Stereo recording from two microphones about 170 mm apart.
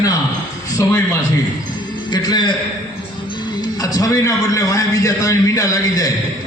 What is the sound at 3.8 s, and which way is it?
A man's voice, 20° left (ahead or behind).